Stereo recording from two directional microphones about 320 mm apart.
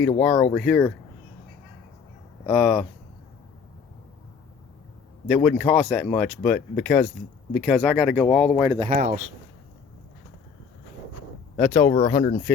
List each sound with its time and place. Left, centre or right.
0.2 s speech: centre
2.5 s speech: centre
5.3 s speech: centre
8.8 s speech: right
11.5 s speech: centre